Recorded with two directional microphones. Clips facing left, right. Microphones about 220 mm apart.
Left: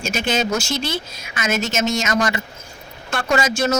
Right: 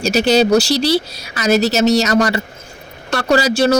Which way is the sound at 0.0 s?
35° right (ahead or behind).